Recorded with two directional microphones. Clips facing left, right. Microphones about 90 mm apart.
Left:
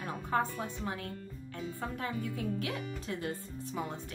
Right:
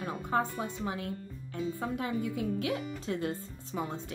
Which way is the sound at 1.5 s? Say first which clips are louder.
Right 5 dB; 20° right (ahead or behind).